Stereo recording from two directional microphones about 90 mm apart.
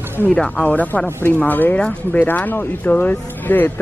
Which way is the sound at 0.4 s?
15° left (ahead or behind).